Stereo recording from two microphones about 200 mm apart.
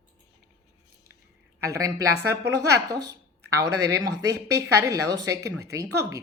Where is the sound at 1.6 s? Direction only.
15° right (ahead or behind).